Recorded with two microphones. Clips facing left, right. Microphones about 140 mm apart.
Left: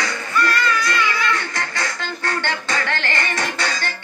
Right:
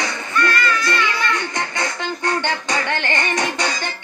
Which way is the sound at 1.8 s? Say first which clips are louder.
Right 4 dB; 20° right (ahead or behind).